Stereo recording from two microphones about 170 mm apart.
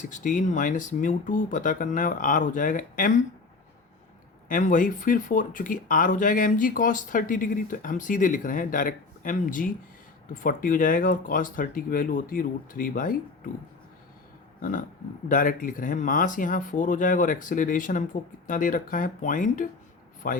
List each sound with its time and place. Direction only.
0.0 s speech: 50° left (ahead or behind)
4.4 s speech: 50° left (ahead or behind)
14.6 s a sound: 50° left (ahead or behind)
15.3 s speech: 55° left (ahead or behind)